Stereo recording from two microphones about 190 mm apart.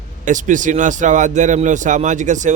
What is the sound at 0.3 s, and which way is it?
A man's voice, 40° right (ahead or behind).